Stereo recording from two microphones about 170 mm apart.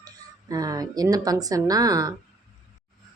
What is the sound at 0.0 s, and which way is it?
A woman's voice, 20° right (ahead or behind).